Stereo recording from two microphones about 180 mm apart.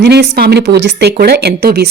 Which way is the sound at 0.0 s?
65° right (ahead or behind).